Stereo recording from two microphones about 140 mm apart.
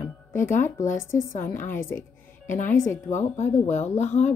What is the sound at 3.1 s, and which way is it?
Speech, 60° left (ahead or behind).